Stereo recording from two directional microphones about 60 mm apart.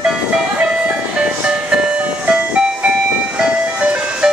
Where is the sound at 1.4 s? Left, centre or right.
Centre.